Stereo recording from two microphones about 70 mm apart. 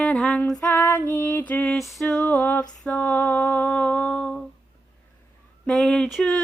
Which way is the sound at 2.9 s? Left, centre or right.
Left.